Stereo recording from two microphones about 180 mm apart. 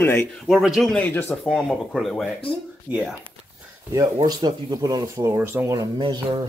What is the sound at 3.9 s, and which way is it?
Speech, 20° right (ahead or behind).